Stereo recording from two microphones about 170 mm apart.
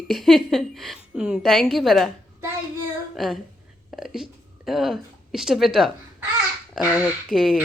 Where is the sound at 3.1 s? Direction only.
Centre (ahead or behind).